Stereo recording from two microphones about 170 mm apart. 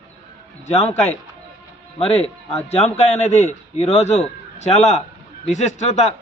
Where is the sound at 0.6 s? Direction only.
40° left (ahead or behind).